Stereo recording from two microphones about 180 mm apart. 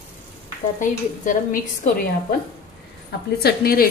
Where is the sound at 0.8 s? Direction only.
45° left (ahead or behind).